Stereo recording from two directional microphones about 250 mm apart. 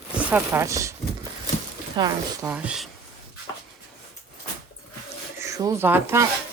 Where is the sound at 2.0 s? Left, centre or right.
Centre.